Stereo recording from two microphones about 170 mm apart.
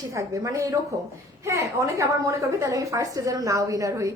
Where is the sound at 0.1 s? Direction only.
20° right (ahead or behind).